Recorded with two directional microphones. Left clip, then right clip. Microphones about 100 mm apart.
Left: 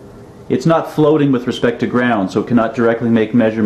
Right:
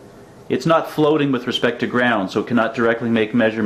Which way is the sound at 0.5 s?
25° right (ahead or behind).